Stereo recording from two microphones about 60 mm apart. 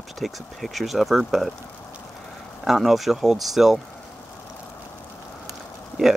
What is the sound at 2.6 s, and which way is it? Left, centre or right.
Speech, centre.